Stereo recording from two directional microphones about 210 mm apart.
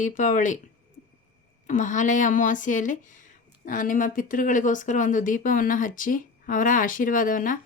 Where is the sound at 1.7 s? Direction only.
35° left (ahead or behind).